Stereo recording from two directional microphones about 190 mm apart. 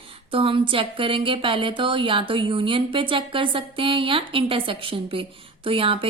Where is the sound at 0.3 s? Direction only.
30° right (ahead or behind).